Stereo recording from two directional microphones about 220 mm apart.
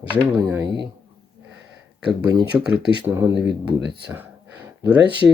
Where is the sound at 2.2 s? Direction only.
5° right (ahead or behind).